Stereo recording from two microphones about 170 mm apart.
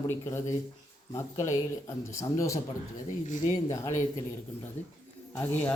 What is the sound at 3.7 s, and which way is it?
Speech, 20° left (ahead or behind).